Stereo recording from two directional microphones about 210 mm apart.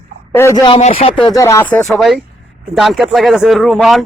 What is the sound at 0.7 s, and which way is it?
Speech, 30° left (ahead or behind).